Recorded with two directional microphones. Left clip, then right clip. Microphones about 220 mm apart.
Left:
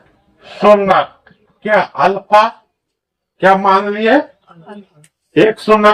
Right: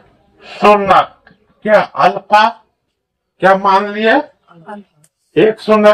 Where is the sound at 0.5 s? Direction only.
15° right (ahead or behind).